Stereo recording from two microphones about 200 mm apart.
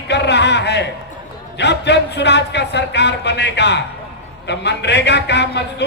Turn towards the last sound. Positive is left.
turn(degrees=60)  # may be behind; listen again after turning